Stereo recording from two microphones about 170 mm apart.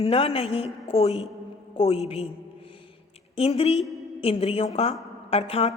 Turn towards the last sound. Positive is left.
turn(degrees=35)  # may be behind; listen again after turning